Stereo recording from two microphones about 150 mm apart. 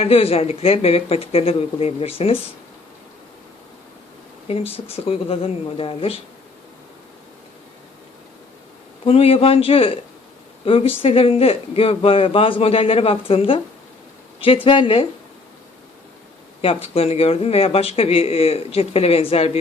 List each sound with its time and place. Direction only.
0.0 s speech: 40° left (ahead or behind)
4.4 s speech: 40° left (ahead or behind)
9.0 s speech: 40° left (ahead or behind)
16.6 s speech: 40° left (ahead or behind)